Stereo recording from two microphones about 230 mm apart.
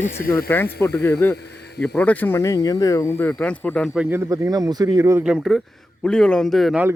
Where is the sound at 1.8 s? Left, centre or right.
Centre.